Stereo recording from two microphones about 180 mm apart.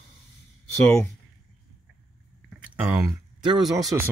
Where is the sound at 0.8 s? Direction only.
10° left (ahead or behind).